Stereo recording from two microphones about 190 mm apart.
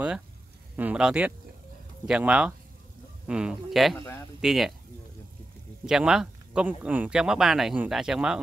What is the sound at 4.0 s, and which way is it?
Speech, 15° left (ahead or behind).